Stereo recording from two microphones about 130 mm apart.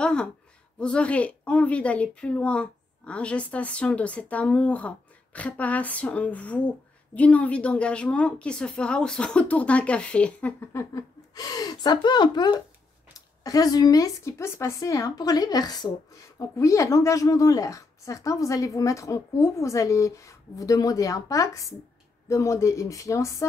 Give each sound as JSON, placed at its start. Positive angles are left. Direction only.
{"t": 0.0, "sound": "a sound", "side_deg": 5}
{"t": 0.7, "sound": "a woman's voice", "side_deg": 10}
{"t": 10.7, "sound": "a woman's voice", "side_deg": 25}